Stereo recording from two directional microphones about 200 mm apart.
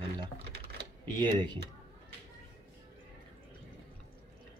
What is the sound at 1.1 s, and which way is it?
Speech, 25° right (ahead or behind).